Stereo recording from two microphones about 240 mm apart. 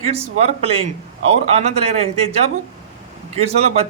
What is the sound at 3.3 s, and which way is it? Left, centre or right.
Speech, right.